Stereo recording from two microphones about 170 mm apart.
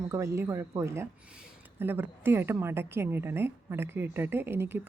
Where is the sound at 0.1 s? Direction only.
15° right (ahead or behind).